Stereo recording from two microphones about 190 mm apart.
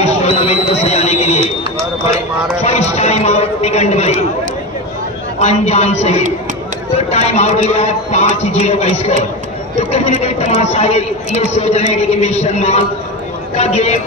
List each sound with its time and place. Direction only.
0.0 s a sound: 35° left (ahead or behind)
2.6 s a man's voice: 35° left (ahead or behind)
5.4 s a woman's voice: 35° left (ahead or behind)